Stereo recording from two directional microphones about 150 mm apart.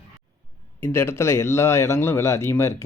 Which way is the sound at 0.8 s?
15° left (ahead or behind).